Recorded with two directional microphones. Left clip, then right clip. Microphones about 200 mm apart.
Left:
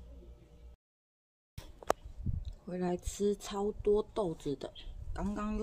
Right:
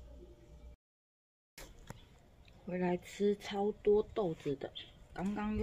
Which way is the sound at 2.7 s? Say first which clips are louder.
Even; 10° left (ahead or behind).